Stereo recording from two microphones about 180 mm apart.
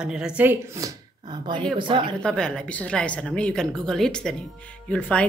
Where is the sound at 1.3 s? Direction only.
25° right (ahead or behind).